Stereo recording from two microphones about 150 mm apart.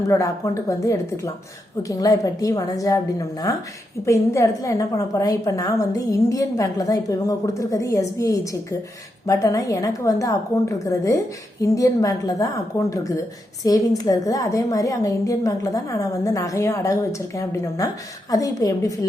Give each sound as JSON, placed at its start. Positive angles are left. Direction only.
{"t": 0.1, "sound": "a woman's voice", "side_deg": 20}